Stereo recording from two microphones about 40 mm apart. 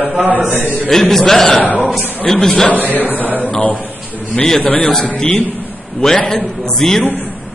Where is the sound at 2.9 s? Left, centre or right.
Left.